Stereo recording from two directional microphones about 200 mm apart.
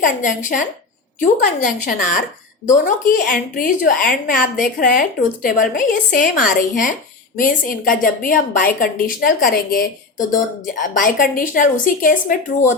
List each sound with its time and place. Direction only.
0.0 s a woman's voice: 40° left (ahead or behind)